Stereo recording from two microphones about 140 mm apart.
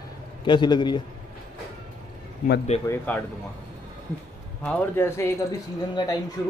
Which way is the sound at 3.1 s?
10° left (ahead or behind).